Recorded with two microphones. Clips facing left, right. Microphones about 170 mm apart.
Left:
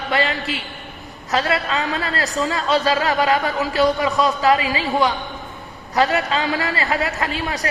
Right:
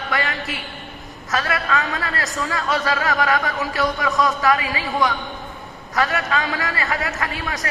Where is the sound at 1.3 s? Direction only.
30° left (ahead or behind).